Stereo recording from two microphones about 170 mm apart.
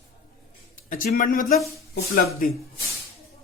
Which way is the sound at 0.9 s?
55° left (ahead or behind).